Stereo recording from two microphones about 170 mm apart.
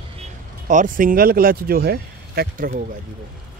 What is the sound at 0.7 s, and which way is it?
Speech, 50° right (ahead or behind).